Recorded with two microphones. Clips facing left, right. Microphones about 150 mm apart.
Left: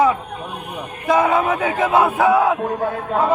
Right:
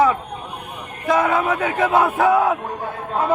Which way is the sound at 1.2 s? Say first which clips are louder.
Left 2 dB; 10° left (ahead or behind).